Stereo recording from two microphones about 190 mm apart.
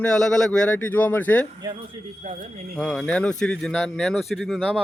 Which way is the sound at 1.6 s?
25° right (ahead or behind).